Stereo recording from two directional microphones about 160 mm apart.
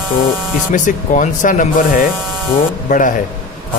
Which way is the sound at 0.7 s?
50° left (ahead or behind).